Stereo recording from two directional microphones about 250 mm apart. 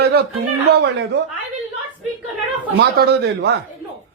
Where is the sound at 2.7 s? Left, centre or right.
Right.